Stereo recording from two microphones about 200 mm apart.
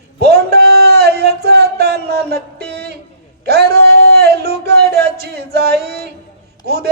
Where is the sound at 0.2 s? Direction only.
55° right (ahead or behind).